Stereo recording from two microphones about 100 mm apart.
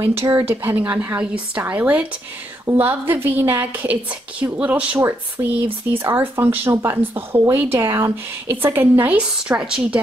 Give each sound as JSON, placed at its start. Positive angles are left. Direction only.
{"t": 0.0, "sound": "a woman's voice", "side_deg": -20}
{"t": 9.4, "sound": "a woman's voice", "side_deg": -10}